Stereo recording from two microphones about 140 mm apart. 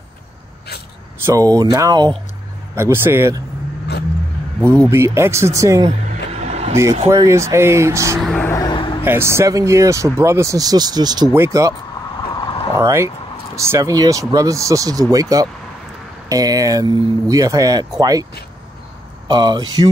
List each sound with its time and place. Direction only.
1.2 s speech: 25° right (ahead or behind)
2.7 s speech: 15° right (ahead or behind)
4.6 s speech: 10° left (ahead or behind)
4.9 s speech: 20° right (ahead or behind)
6.0 s vehicle: 50° right (ahead or behind)
6.7 s speech: 20° right (ahead or behind)
8.2 s a sound: centre (ahead or behind)
8.5 s vehicle: 30° left (ahead or behind)
9.0 s speech: 15° right (ahead or behind)
12.4 s vehicle: 40° left (ahead or behind)
12.7 s speech: 20° right (ahead or behind)
19.2 s speech: 30° right (ahead or behind)